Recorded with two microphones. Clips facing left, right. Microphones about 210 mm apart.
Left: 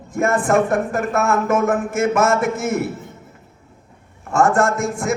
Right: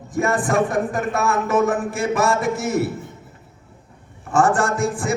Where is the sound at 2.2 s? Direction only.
30° right (ahead or behind).